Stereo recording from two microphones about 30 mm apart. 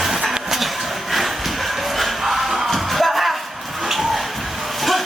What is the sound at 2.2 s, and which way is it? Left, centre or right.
Music, centre.